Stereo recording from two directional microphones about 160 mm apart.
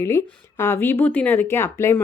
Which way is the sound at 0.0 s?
15° left (ahead or behind).